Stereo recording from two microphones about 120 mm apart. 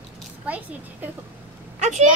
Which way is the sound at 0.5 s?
15° right (ahead or behind).